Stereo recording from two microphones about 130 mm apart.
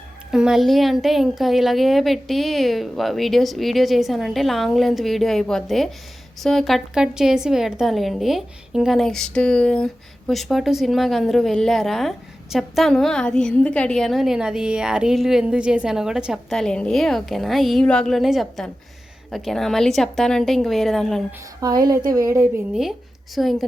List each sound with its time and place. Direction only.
0.3 s a woman's voice: 5° right (ahead or behind)
21.6 s a woman's voice: 30° right (ahead or behind)
22.7 s speech: centre (ahead or behind)